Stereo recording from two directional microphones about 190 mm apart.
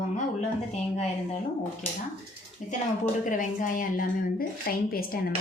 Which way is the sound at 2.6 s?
40° left (ahead or behind).